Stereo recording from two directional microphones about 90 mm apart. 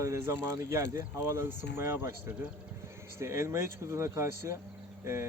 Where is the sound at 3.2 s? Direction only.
30° right (ahead or behind).